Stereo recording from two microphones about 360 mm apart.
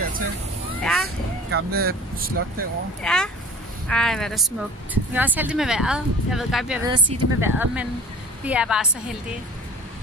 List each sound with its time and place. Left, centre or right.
0.8 s honk: centre
1.5 s speech: right
3.0 s speech: centre